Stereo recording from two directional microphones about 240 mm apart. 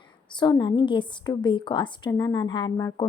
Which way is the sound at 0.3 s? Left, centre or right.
Centre.